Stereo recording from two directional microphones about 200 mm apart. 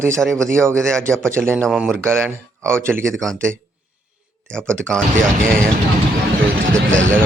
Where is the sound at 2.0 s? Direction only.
10° right (ahead or behind).